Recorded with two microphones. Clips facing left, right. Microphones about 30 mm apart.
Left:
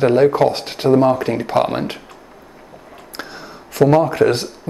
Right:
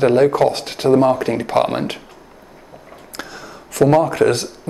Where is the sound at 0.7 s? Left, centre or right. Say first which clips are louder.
Even; centre.